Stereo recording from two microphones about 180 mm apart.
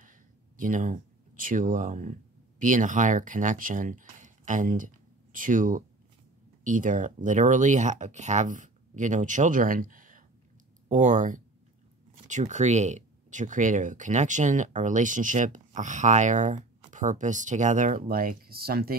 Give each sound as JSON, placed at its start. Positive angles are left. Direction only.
{"t": 0.6, "sound": "speech", "side_deg": -45}